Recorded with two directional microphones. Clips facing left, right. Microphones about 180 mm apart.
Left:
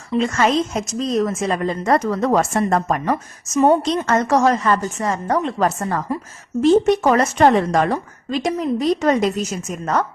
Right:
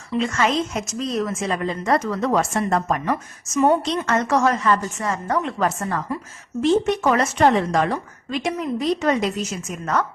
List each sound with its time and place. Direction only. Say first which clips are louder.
0.2 s a woman's voice: left 3 dB; 40° left (ahead or behind)
3.6 s a woman's voice: left 3 dB; 35° left (ahead or behind)